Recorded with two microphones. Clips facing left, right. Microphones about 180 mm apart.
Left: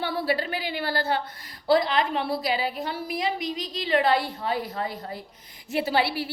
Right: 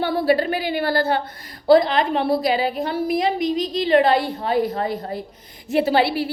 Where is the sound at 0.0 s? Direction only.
50° right (ahead or behind).